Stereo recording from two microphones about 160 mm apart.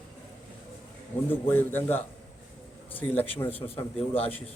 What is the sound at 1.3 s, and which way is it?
A man's voice, 10° left (ahead or behind).